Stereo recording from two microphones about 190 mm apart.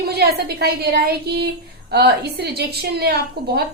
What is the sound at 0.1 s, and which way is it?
A woman's voice, 55° right (ahead or behind).